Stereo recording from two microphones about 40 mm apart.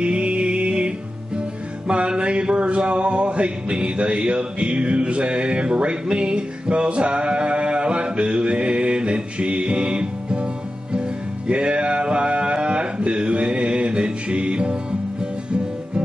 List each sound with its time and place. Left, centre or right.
0.0 s music: right